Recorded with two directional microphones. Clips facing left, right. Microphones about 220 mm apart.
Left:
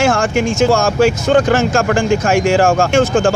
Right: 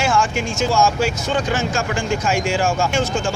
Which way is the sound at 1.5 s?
90° left.